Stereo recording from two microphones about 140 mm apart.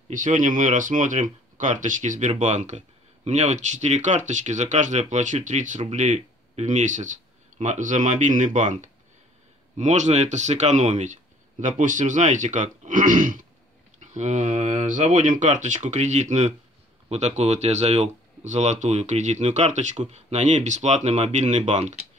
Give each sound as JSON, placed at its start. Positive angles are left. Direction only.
{"t": 0.1, "sound": "speech", "side_deg": -65}